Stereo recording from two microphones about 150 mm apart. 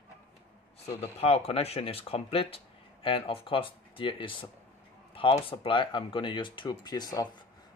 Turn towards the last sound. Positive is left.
turn(degrees=25)  # may be behind; listen again after turning